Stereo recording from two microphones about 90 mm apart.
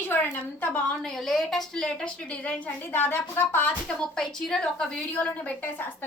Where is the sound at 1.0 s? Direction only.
5° left (ahead or behind); by 3.8 s 20° left (ahead or behind).